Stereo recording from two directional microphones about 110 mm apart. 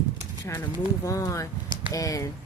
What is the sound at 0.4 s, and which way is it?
Speech, 25° left (ahead or behind).